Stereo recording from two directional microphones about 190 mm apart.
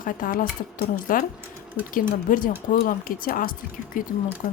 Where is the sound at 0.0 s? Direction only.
45° left (ahead or behind).